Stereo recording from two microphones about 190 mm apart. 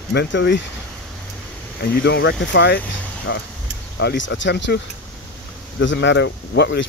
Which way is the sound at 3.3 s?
80° left.